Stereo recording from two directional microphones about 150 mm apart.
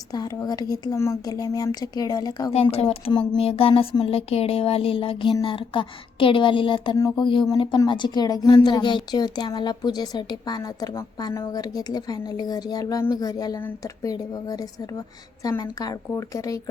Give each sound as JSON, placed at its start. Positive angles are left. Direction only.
{"t": 0.1, "sound": "a woman's voice", "side_deg": 25}
{"t": 2.7, "sound": "a woman's voice", "side_deg": 40}